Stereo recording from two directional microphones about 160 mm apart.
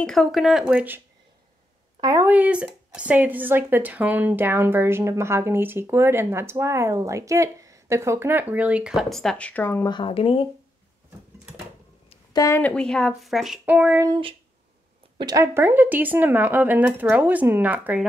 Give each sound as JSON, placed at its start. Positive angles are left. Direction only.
{"t": 0.0, "sound": "speech", "side_deg": 0}
{"t": 2.0, "sound": "speech", "side_deg": -20}
{"t": 9.8, "sound": "speech", "side_deg": 30}
{"t": 12.3, "sound": "speech", "side_deg": 20}
{"t": 15.1, "sound": "speech", "side_deg": -25}